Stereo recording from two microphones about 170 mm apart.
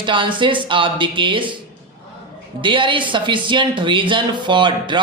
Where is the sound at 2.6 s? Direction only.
30° right (ahead or behind).